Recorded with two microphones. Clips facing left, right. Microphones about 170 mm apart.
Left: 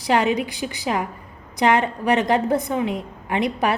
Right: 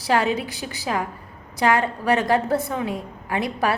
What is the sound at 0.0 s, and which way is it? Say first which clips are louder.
A woman's voice: left 2 dB; 20° left (ahead or behind).